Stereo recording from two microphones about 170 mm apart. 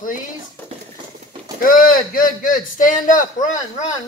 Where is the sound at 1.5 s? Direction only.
55° left (ahead or behind).